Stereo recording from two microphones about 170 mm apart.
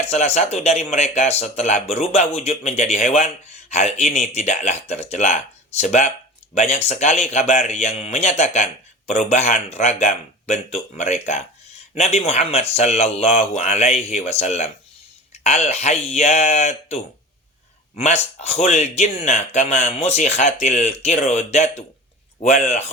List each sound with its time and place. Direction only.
0.1 s speech: 40° left (ahead or behind)